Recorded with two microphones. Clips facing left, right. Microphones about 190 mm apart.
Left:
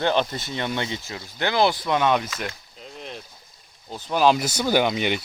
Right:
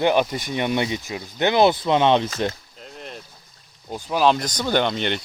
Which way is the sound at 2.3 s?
35° right (ahead or behind).